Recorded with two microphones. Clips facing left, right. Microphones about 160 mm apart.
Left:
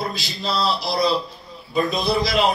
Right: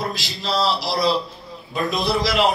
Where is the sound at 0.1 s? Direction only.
90° right.